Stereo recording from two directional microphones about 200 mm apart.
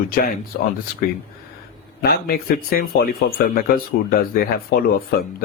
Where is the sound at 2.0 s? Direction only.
50° left (ahead or behind).